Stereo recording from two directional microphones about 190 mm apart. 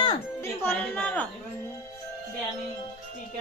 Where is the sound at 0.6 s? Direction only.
10° left (ahead or behind).